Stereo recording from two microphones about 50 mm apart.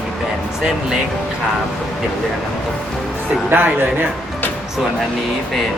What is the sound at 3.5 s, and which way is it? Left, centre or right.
Speech, right.